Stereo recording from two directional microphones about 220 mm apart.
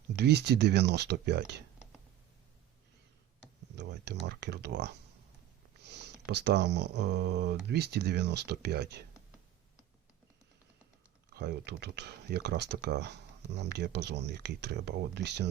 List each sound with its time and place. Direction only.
0.2 s speech: 50° right (ahead or behind)
3.8 s speech: 50° right (ahead or behind)
11.3 s speech: 45° right (ahead or behind)